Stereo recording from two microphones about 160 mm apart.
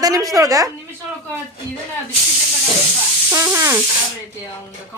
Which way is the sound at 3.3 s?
15° right (ahead or behind).